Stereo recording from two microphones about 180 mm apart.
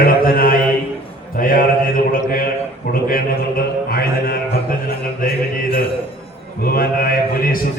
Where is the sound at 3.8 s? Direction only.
55° left (ahead or behind).